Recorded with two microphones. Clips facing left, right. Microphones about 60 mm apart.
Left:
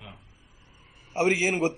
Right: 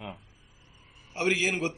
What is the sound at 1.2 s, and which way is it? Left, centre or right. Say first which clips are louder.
Speech: left 4 dB; centre.